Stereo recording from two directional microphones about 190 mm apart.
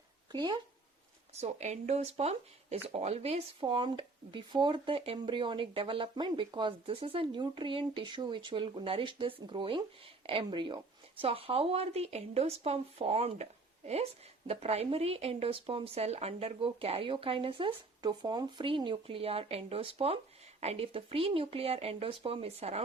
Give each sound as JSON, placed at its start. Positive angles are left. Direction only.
{"t": 0.3, "sound": "speech", "side_deg": -25}
{"t": 1.4, "sound": "speech", "side_deg": -35}